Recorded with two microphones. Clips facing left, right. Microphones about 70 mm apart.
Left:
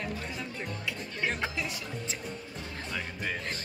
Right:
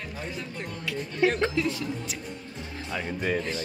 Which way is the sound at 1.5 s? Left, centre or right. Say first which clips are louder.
Right 8 dB; centre.